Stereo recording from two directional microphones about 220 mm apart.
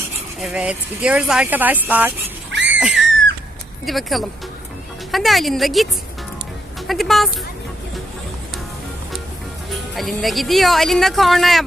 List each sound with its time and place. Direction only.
0.3 s speech: 5° right (ahead or behind)
2.5 s a sound: 55° right (ahead or behind)
3.8 s speech: centre (ahead or behind)
9.7 s speech: centre (ahead or behind)